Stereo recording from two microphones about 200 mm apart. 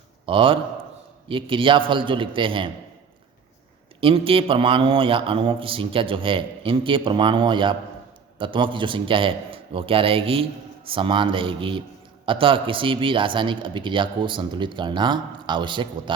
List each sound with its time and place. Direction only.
0.3 s a man's voice: 25° right (ahead or behind)
4.0 s a man's voice: 25° right (ahead or behind)